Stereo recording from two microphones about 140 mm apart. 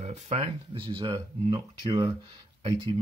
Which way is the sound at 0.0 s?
55° right (ahead or behind).